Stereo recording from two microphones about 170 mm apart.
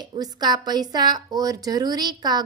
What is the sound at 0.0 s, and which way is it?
Speech, 25° right (ahead or behind).